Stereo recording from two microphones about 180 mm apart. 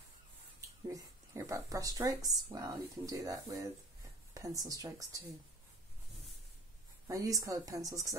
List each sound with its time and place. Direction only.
0.8 s speech: 15° right (ahead or behind)
7.1 s speech: 20° right (ahead or behind)